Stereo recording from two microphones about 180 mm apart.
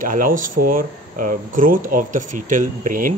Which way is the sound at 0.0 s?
50° right (ahead or behind).